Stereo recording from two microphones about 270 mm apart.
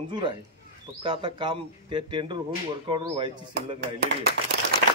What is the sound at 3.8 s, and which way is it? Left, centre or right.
Speech, right.